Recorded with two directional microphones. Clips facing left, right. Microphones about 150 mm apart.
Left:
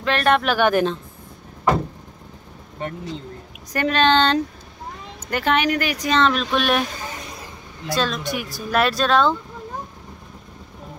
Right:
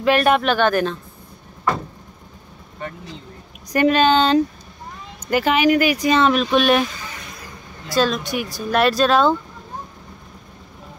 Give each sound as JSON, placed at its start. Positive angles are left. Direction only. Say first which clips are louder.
{"t": 0.0, "sound": "speech", "louder": "right 3 dB", "side_deg": -10}
{"t": 0.6, "sound": "a woman's voice", "louder": "even", "side_deg": 20}
{"t": 3.7, "sound": "speech", "louder": "right 3 dB", "side_deg": -10}
{"t": 7.9, "sound": "speech", "louder": "right 4 dB", "side_deg": -5}